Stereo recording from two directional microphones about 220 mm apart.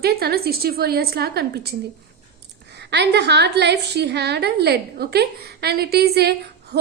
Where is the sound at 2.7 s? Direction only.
50° right (ahead or behind).